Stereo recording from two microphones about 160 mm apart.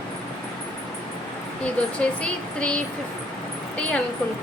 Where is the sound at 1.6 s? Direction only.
5° left (ahead or behind).